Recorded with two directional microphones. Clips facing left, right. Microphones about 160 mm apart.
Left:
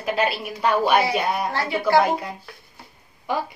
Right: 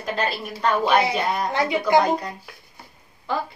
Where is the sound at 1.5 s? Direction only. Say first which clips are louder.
Right 3 dB; 20° right (ahead or behind).